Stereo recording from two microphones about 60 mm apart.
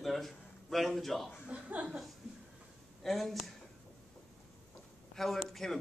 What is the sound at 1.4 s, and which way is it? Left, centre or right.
Speech, right.